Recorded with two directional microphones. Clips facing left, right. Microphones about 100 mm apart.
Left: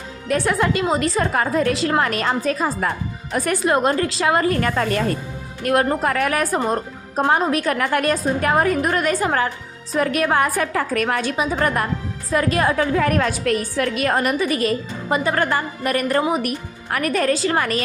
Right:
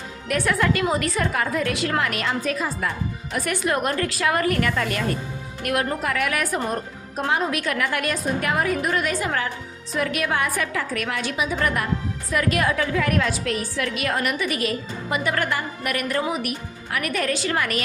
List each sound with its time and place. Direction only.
0.3 s a woman's voice: 30° left (ahead or behind)
4.7 s a woman's voice: 40° left (ahead or behind)